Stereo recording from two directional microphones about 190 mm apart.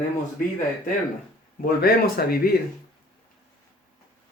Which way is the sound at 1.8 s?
50° left (ahead or behind).